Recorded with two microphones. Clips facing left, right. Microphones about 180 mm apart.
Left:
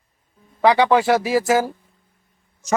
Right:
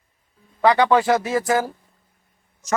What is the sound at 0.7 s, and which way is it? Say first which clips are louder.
Speech: left 1 dB; 10° left (ahead or behind).